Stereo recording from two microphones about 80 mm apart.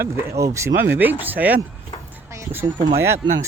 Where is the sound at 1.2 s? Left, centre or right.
Right.